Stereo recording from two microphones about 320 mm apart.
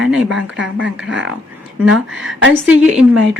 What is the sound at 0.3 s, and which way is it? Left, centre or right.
Speech, right.